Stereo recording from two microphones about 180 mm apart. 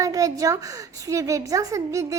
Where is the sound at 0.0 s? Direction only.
20° right (ahead or behind).